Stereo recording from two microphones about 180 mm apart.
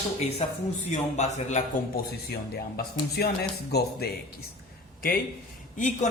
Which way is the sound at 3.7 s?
60° left (ahead or behind).